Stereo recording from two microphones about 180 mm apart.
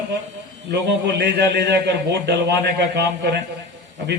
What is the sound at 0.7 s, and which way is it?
A man's voice, 70° right (ahead or behind).